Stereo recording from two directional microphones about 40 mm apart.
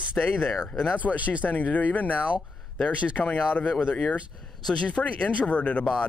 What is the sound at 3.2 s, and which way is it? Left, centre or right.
Speech, left.